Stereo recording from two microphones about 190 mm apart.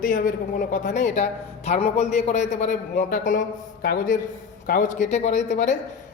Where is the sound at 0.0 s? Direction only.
45° left (ahead or behind).